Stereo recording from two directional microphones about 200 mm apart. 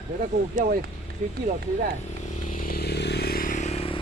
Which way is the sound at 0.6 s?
45° right (ahead or behind).